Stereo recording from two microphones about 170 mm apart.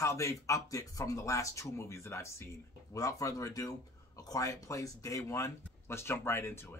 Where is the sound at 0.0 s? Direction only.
20° left (ahead or behind).